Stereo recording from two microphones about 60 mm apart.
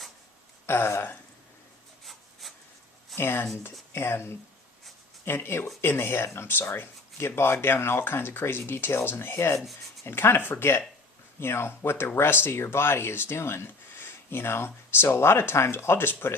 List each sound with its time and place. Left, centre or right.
0.7 s speech: left
2.4 s a sound: centre
3.2 s speech: left